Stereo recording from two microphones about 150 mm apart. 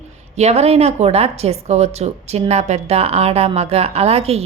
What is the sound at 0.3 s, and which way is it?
A woman's voice, 45° right (ahead or behind).